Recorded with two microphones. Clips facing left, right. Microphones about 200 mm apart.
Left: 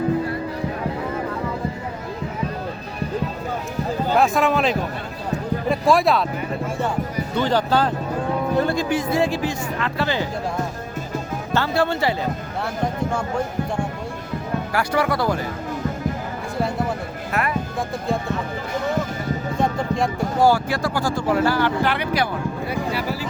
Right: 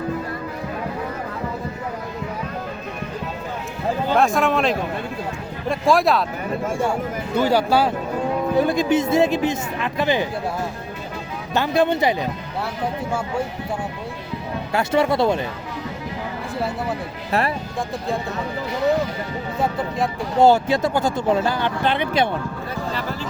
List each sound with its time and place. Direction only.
4.2 s speech: centre (ahead or behind)
7.3 s speech: 10° right (ahead or behind)
11.5 s speech: 15° right (ahead or behind)
13.1 s speech: 5° right (ahead or behind)
14.7 s speech: 25° right (ahead or behind)
18.7 s a sound: 50° left (ahead or behind)
19.5 s music: 5° right (ahead or behind)
20.4 s speech: 20° right (ahead or behind)
22.7 s speech: 10° left (ahead or behind)